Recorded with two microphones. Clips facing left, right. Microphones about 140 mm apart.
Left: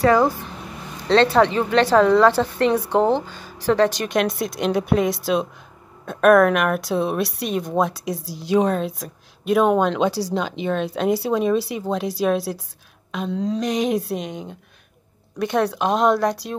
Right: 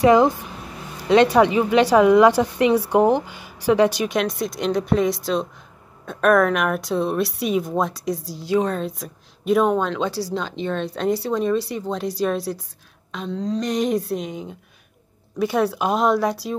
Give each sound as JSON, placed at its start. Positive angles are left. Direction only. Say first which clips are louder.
{"t": 0.0, "sound": "a woman's voice", "louder": "right 2 dB", "side_deg": -20}
{"t": 8.4, "sound": "a woman's voice", "louder": "left 3 dB", "side_deg": 20}
{"t": 8.7, "sound": "a woman's voice", "louder": "left 2 dB", "side_deg": 0}
{"t": 9.8, "sound": "speech", "louder": "left 4 dB", "side_deg": 15}